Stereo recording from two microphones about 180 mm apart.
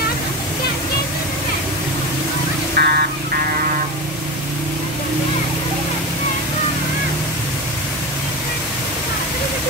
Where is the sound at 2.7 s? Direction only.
60° right (ahead or behind).